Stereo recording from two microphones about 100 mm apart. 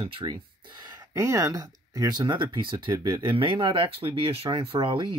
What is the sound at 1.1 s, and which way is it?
Speech, 30° right (ahead or behind).